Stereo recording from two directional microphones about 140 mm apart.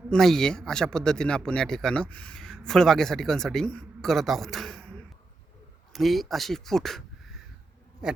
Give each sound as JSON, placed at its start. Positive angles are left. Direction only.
{"t": 0.1, "sound": "speech", "side_deg": 5}
{"t": 5.9, "sound": "speech", "side_deg": 0}